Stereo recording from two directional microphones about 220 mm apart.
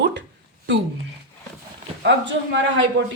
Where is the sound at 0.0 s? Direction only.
55° right (ahead or behind).